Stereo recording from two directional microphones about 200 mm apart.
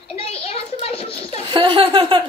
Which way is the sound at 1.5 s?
25° right (ahead or behind).